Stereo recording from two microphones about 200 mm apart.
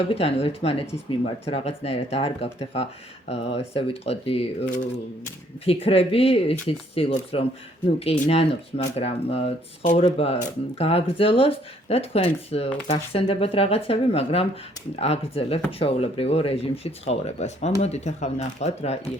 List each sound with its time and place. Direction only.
0.1 s speech: 30° left (ahead or behind)